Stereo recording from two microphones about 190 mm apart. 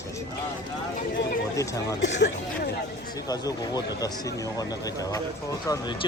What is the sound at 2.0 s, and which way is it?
Speech, 70° left (ahead or behind).